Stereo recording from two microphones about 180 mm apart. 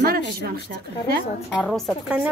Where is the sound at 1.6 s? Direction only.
Centre (ahead or behind).